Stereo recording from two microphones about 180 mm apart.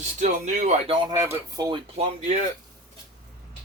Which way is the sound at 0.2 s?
40° right (ahead or behind).